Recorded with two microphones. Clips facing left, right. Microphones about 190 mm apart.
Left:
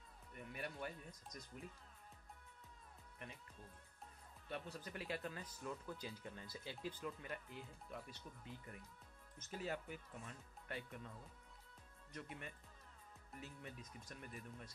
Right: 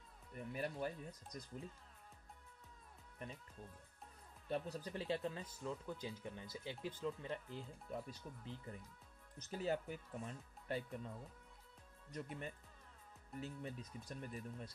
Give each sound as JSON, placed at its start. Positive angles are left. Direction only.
{"t": 0.6, "sound": "speech", "side_deg": -35}
{"t": 4.5, "sound": "speech", "side_deg": -35}
{"t": 12.1, "sound": "speech", "side_deg": -35}